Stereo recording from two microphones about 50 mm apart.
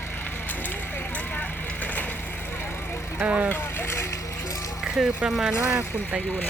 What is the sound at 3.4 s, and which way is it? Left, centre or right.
Speech, left.